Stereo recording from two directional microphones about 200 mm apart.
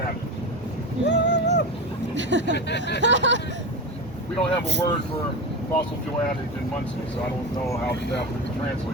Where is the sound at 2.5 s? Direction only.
60° left (ahead or behind).